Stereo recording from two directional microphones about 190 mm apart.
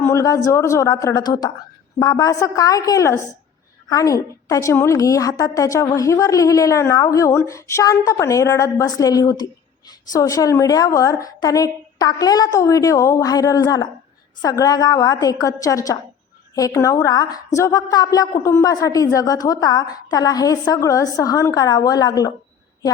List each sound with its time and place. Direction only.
0.0 s a woman's voice: 15° left (ahead or behind)